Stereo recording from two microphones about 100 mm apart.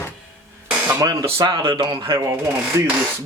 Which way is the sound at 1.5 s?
50° right (ahead or behind).